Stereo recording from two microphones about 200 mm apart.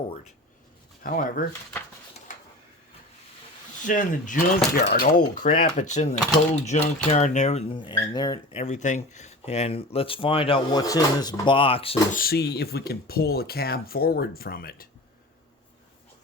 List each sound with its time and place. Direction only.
1.0 s speech: 45° left (ahead or behind)
2.3 s a sound: 40° left (ahead or behind)
3.8 s speech: 40° left (ahead or behind); by 8.6 s 20° left (ahead or behind)
8.6 s speech: 35° left (ahead or behind)
12.1 s speech: 50° left (ahead or behind)